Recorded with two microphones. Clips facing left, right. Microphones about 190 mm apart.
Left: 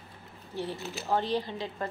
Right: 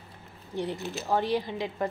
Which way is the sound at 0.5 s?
15° right (ahead or behind).